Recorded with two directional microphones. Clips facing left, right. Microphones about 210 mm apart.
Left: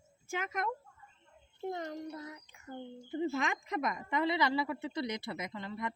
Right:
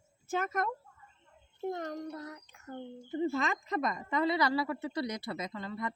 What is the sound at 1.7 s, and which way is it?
Speech, 55° right (ahead or behind).